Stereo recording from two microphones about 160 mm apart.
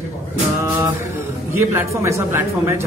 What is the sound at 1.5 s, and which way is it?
A man's voice, 15° right (ahead or behind).